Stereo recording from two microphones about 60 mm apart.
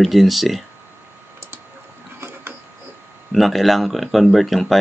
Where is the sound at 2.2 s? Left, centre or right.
Right.